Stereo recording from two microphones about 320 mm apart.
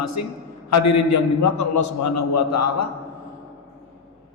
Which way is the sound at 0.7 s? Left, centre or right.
Left.